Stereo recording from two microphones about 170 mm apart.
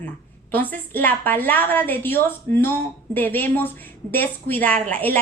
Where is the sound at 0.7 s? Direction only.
10° left (ahead or behind).